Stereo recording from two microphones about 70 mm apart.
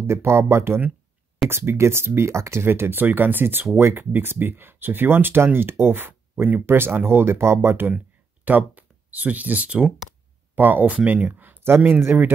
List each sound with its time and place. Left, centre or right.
0.0 s speech: right